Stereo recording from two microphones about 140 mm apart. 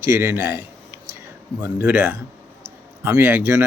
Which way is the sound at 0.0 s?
15° right (ahead or behind).